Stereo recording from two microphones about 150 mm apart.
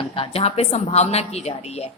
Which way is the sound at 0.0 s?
40° left (ahead or behind).